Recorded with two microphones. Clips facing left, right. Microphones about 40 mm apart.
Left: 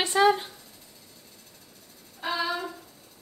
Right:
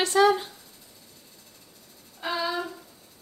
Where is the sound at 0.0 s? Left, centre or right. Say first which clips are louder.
Right 1 dB; left.